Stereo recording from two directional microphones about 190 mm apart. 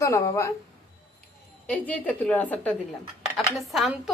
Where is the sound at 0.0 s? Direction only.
15° left (ahead or behind).